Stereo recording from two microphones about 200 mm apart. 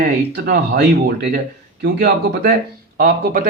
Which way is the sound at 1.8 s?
55° right (ahead or behind).